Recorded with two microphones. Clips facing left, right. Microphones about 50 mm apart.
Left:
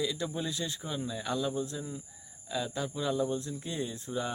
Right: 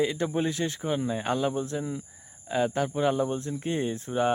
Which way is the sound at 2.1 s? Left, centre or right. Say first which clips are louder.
Right 6 dB; right.